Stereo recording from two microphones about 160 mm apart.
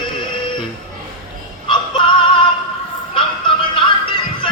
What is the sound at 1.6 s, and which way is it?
Synthetic singing, 30° left (ahead or behind).